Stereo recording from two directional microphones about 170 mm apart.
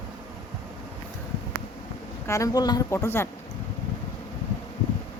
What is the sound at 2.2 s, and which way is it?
Speech, 20° left (ahead or behind).